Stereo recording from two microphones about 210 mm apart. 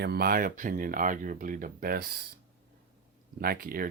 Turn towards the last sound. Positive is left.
turn(degrees=-45)  # may be behind; listen again after turning